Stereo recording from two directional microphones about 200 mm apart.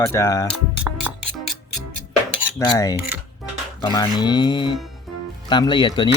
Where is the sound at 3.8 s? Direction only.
20° left (ahead or behind).